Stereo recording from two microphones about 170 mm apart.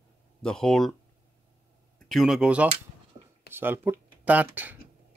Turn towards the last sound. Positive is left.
turn(degrees=-10)  # may be behind; listen again after turning